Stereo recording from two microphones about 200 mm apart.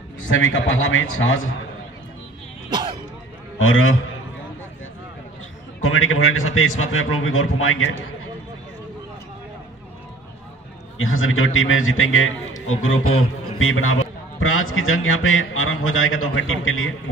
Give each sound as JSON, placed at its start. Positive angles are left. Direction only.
{"t": 0.3, "sound": "a man's voice", "side_deg": 75}
{"t": 3.5, "sound": "a man's voice", "side_deg": 90}
{"t": 5.8, "sound": "a man's voice", "side_deg": 90}
{"t": 11.0, "sound": "a man's voice", "side_deg": 90}